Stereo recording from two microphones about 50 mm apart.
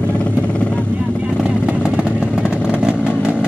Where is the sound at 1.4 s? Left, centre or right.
Right.